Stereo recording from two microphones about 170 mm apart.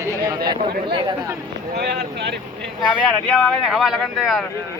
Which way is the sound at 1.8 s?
75° right (ahead or behind).